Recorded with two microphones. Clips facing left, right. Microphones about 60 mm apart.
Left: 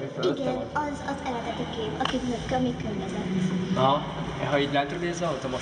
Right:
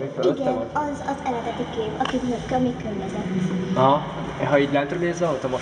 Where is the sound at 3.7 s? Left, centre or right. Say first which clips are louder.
Right 6 dB; right.